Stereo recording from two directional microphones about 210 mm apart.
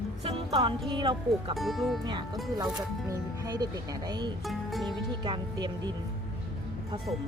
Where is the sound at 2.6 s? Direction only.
15° right (ahead or behind).